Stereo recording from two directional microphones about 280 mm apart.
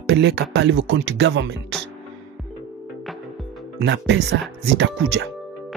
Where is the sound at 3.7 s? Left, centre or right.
Right.